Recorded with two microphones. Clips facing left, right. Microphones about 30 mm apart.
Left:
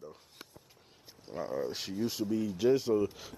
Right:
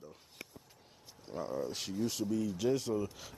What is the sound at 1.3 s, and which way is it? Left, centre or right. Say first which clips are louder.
Speech: left 2 dB; centre.